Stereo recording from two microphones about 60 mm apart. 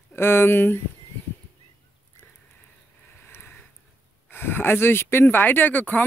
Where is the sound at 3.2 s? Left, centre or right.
Left.